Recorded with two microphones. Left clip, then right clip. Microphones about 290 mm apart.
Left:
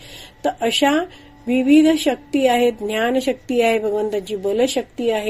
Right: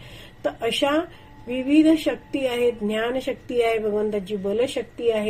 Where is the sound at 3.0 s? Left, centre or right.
Left.